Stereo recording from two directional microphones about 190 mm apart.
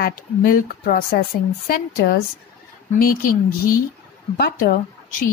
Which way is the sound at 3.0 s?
50° left (ahead or behind).